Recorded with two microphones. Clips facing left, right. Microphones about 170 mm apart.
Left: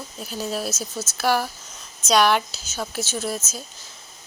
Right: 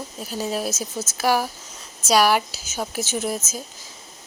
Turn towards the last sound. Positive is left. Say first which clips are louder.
# right 2 dB
turn(degrees=-15)  # may be behind; listen again after turning